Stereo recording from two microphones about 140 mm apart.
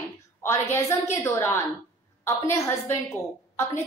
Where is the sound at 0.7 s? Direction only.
20° left (ahead or behind).